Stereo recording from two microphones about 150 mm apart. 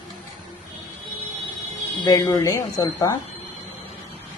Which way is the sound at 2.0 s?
25° left (ahead or behind).